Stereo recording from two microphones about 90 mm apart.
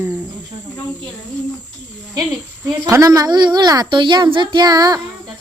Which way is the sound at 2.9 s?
40° right (ahead or behind).